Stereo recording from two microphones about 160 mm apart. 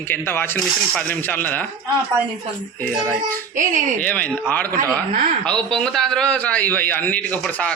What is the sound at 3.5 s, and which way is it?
Speech, 55° right (ahead or behind).